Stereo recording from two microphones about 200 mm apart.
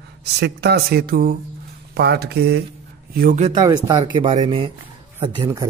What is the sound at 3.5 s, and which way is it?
Speech, 20° right (ahead or behind).